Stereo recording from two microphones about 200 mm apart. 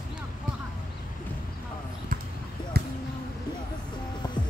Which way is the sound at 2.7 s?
55° right (ahead or behind).